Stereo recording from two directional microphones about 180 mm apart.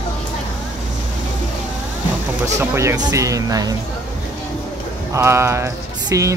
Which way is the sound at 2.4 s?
15° right (ahead or behind).